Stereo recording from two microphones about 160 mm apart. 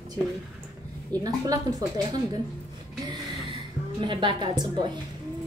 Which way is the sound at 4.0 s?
30° right (ahead or behind).